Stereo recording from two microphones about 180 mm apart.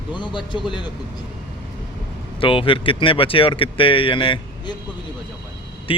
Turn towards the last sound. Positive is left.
turn(degrees=30)  # may be behind; listen again after turning